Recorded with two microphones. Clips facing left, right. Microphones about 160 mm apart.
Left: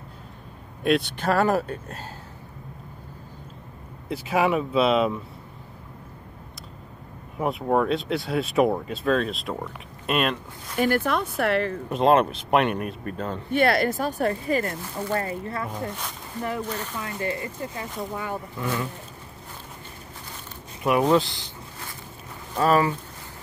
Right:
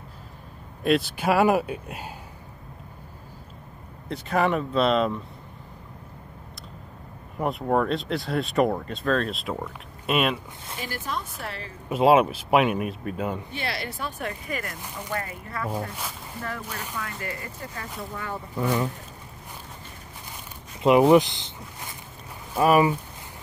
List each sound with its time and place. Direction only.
0.8 s speech: centre (ahead or behind)
4.1 s speech: 5° left (ahead or behind)
7.3 s speech: centre (ahead or behind)
10.8 s speech: 60° left (ahead or behind)
11.9 s speech: 5° right (ahead or behind)
13.5 s speech: 55° left (ahead or behind); by 15.7 s 30° left (ahead or behind)
16.4 s speech: 20° left (ahead or behind)
20.8 s a sound: 20° right (ahead or behind)
22.5 s speech: 10° right (ahead or behind)